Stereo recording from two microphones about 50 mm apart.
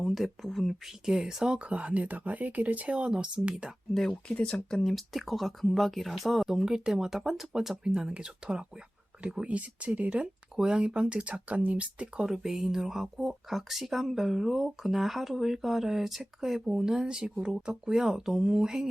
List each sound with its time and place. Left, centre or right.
0.0 s speech: centre
0.9 s speech: centre
1.5 s speech: right
3.9 s speech: centre; by 12.2 s right
12.2 s speech: centre